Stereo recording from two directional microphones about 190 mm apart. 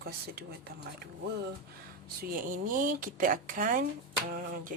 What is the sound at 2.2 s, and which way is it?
Speech, 50° right (ahead or behind).